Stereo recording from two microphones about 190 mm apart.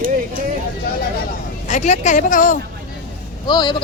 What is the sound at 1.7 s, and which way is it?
Speech, 40° left (ahead or behind).